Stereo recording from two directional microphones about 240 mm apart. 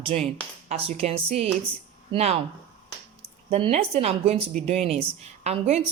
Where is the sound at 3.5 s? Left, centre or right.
Right.